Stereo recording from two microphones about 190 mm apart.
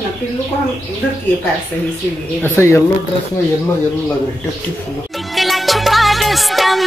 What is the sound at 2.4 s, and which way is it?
Speech, 10° left (ahead or behind).